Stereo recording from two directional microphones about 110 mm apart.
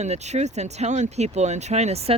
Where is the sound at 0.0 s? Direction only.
90° right.